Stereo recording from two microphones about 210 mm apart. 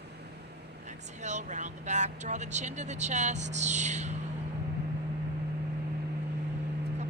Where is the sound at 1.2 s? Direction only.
35° right (ahead or behind).